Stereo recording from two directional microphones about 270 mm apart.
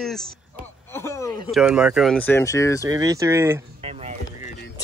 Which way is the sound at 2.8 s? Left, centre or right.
Centre.